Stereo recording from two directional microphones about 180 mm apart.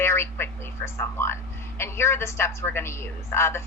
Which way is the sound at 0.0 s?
15° left (ahead or behind).